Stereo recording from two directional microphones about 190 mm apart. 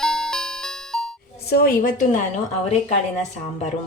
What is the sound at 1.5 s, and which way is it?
Speech, 55° left (ahead or behind).